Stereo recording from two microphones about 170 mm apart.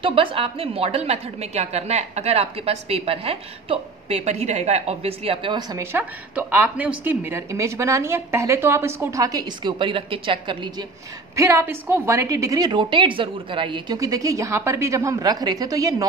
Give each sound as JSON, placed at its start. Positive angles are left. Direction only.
{"t": 0.0, "sound": "a woman's voice", "side_deg": -30}
{"t": 5.9, "sound": "a woman's voice", "side_deg": -10}
{"t": 11.3, "sound": "a woman's voice", "side_deg": -15}